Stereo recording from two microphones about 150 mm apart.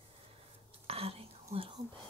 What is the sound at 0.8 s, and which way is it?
Whispering, 40° right (ahead or behind).